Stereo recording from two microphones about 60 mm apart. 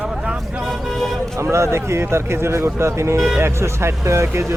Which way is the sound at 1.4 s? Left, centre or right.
Right.